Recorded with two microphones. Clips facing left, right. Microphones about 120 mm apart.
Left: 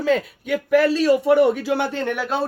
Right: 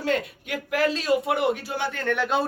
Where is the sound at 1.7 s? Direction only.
80° left.